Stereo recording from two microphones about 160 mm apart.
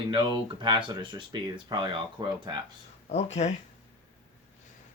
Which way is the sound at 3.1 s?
45° left (ahead or behind).